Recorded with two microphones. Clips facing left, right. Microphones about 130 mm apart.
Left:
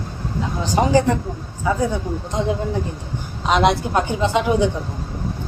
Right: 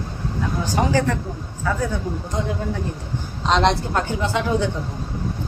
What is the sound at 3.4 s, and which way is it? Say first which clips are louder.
A woman's voice: left 2 dB; 10° left (ahead or behind).